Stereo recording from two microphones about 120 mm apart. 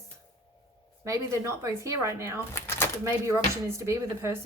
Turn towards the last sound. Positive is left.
turn(degrees=-20)  # may be behind; listen again after turning